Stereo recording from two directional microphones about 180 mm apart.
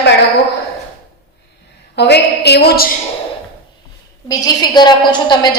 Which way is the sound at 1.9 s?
65° left (ahead or behind).